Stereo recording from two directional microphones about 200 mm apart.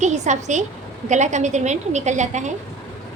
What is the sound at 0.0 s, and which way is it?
A woman's voice, 35° right (ahead or behind).